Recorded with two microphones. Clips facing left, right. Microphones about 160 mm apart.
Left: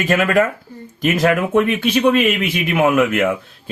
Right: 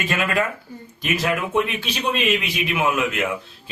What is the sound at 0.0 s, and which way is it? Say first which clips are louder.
Speech: left 7 dB; 45° left (ahead or behind).